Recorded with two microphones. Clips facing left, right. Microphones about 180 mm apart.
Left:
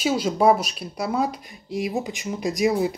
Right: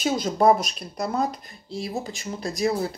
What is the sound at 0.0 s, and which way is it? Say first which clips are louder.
Speech: left 1 dB; 10° left (ahead or behind).